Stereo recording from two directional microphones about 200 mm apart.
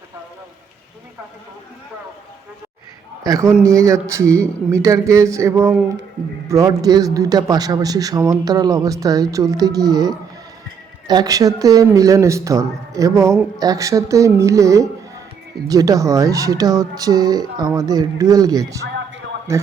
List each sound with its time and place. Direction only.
3.2 s speech: 15° right (ahead or behind)